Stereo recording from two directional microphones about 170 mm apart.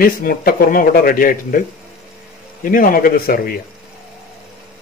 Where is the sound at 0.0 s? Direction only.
60° left (ahead or behind).